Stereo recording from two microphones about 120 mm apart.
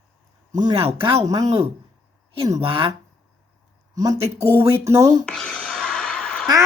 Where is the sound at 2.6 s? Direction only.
50° right (ahead or behind).